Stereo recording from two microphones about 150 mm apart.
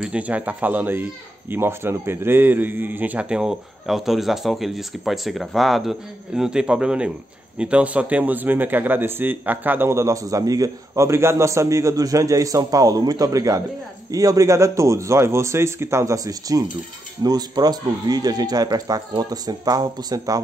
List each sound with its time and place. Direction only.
0.0 s a man's voice: 10° right (ahead or behind); by 20.4 s 25° right (ahead or behind)